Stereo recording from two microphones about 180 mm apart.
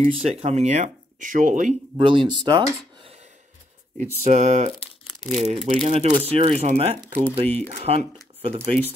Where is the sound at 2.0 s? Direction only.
30° right (ahead or behind).